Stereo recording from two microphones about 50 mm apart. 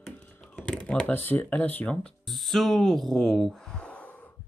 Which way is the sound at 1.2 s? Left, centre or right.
Left.